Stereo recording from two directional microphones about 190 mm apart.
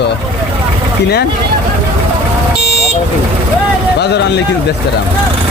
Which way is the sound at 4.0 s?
60° left (ahead or behind).